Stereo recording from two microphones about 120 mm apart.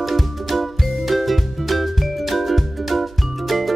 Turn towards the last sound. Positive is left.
turn(degrees=0)  # may be behind; listen again after turning